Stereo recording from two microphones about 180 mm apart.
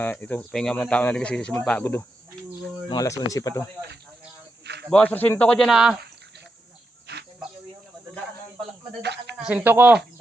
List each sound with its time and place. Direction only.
0.0 s speech: 10° left (ahead or behind)
4.6 s a sound: 70° right (ahead or behind)
4.9 s speech: 10° left (ahead or behind)
7.1 s cricket: 65° right (ahead or behind)
9.0 s speech: 70° right (ahead or behind)
9.4 s speech: 5° right (ahead or behind)